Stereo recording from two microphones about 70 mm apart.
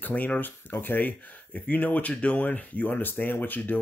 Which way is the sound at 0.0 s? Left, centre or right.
Left.